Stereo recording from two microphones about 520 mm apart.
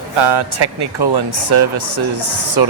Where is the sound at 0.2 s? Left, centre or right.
Right.